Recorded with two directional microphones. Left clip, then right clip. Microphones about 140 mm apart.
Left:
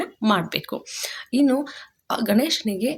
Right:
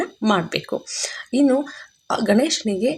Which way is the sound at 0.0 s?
30° right (ahead or behind).